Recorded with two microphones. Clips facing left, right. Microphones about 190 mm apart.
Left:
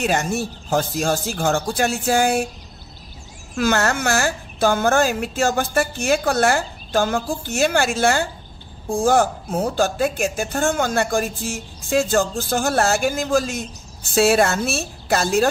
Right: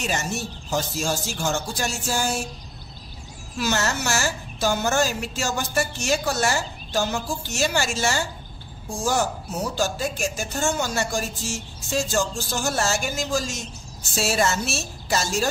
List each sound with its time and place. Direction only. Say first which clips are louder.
0.0 s speech: left 6 dB; 55° left (ahead or behind)
3.5 s speech: left 5 dB; 55° left (ahead or behind)